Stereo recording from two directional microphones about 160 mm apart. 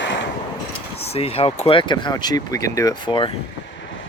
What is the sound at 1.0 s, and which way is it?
Speech, 40° left (ahead or behind).